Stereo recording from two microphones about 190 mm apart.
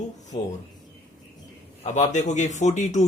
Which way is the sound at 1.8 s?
40° left (ahead or behind).